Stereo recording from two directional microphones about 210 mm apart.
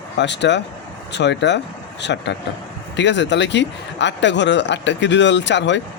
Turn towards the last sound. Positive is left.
turn(degrees=60)  # may be behind; listen again after turning